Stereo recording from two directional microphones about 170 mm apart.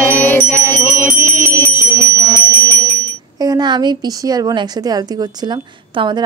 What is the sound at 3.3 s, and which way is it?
A woman's voice, 20° right (ahead or behind).